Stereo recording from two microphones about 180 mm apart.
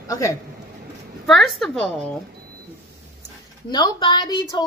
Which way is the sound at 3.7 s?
25° left (ahead or behind).